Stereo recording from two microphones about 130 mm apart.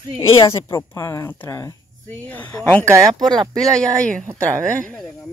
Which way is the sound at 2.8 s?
20° right (ahead or behind).